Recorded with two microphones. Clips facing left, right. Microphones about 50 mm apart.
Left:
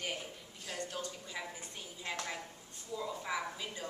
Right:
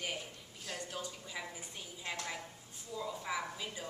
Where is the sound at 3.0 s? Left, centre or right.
Centre.